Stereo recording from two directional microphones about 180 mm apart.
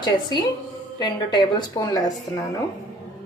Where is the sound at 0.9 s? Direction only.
25° left (ahead or behind).